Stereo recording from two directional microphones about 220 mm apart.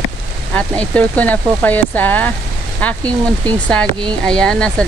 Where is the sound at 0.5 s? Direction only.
5° left (ahead or behind).